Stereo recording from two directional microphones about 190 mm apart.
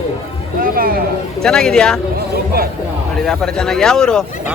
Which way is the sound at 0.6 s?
50° right (ahead or behind).